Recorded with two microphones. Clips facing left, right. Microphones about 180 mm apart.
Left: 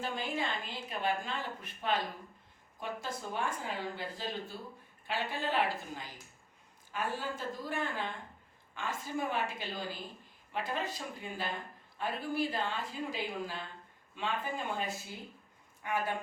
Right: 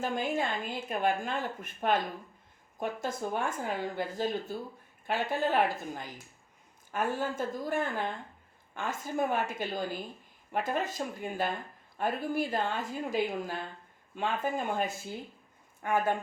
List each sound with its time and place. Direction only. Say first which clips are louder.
0.0 s speech: right 5 dB; 45° right (ahead or behind)